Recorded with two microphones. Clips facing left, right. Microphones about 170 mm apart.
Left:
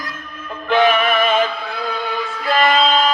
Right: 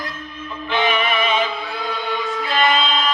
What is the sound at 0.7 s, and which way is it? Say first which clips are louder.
Music: left 5 dB; 45° left (ahead or behind).